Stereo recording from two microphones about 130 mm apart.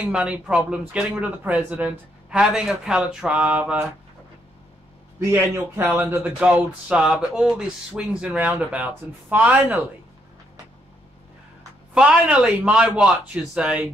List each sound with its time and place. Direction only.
0.1 s speech: 5° right (ahead or behind)
5.3 s speech: 15° right (ahead or behind)
11.9 s speech: 5° right (ahead or behind)